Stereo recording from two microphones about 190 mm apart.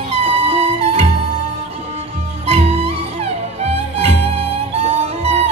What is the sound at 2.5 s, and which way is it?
Music, 35° right (ahead or behind).